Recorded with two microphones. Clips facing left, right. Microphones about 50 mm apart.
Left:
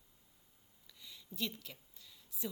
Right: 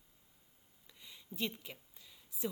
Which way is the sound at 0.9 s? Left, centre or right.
Right.